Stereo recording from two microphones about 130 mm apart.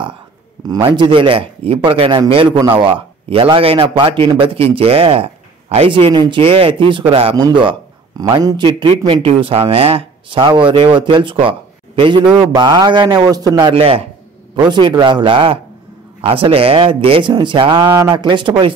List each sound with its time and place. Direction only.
0.8 s a man's voice: 40° right (ahead or behind)
7.3 s speech: 35° right (ahead or behind)
13.7 s a man's voice: 45° right (ahead or behind)
14.5 s a man's voice: 35° right (ahead or behind)